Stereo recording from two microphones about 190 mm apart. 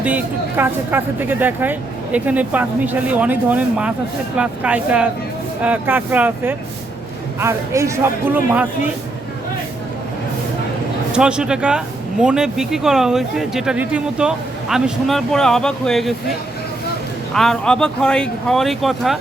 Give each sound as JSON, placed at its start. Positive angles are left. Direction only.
{"t": 0.0, "sound": "speech", "side_deg": -10}
{"t": 11.1, "sound": "speech", "side_deg": -5}
{"t": 17.3, "sound": "speech", "side_deg": 0}